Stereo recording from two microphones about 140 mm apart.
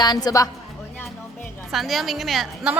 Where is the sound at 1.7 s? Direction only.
Centre (ahead or behind).